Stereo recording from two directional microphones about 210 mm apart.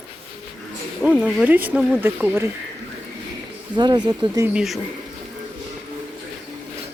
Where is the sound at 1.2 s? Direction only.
5° right (ahead or behind).